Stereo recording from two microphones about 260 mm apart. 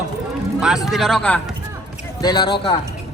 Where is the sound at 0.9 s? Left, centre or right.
Centre.